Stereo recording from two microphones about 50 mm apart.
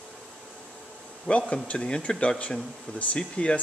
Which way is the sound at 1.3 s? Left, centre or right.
Left.